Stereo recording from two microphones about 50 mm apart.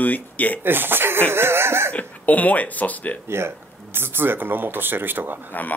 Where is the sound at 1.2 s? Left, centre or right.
Right.